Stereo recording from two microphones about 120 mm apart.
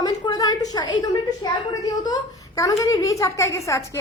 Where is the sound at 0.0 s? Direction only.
35° left (ahead or behind).